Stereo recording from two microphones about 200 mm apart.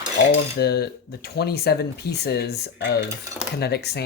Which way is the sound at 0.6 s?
55° left (ahead or behind).